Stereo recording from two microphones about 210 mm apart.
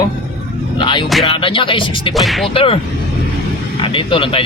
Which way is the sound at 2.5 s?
25° left (ahead or behind).